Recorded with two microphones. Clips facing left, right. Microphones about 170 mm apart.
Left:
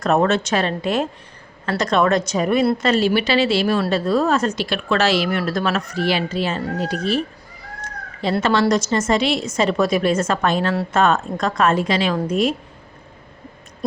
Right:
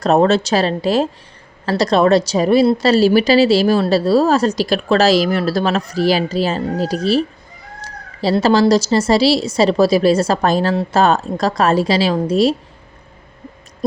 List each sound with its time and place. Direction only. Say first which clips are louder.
0.0 s a woman's voice: right 4 dB; 35° right (ahead or behind)